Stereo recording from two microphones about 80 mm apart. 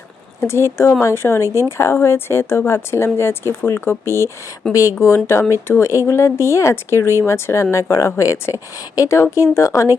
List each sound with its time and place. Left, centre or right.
0.3 s speech: left